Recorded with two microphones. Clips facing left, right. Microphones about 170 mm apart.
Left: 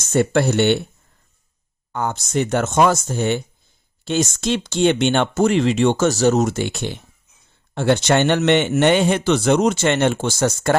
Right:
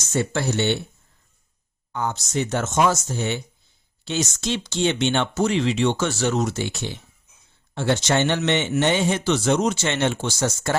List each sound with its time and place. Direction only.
0.0 s speech: 55° left (ahead or behind)
1.9 s speech: 50° left (ahead or behind)